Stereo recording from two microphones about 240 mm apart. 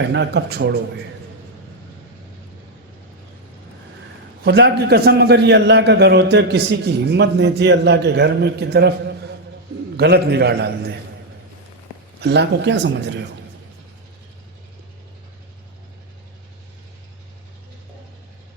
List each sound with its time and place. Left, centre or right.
0.0 s a man's voice: right
4.4 s a man's voice: right
12.2 s a man's voice: right